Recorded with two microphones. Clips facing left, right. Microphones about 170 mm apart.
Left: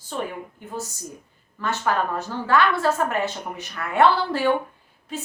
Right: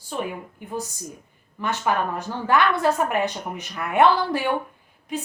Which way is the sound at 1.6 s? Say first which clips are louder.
Even; 15° right (ahead or behind).